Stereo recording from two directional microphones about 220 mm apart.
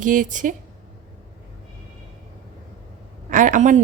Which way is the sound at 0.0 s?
35° right (ahead or behind).